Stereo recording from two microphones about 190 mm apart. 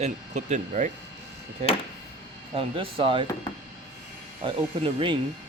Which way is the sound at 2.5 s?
30° right (ahead or behind).